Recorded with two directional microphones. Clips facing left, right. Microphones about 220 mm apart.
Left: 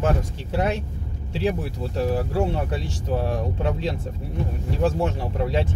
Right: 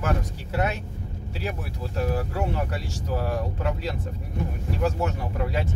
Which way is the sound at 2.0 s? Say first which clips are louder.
Left 4 dB; 30° left (ahead or behind).